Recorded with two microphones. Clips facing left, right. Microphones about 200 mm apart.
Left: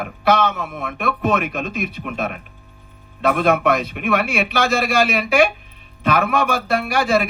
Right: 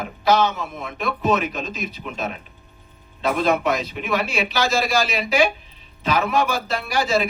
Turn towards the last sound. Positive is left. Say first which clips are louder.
# left 3 dB
turn(degrees=55)  # may be behind; listen again after turning